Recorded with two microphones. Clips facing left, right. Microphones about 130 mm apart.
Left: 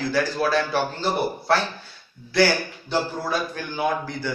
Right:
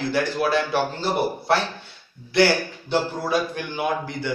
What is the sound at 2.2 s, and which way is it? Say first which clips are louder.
A man's voice: right 1 dB; 25° right (ahead or behind).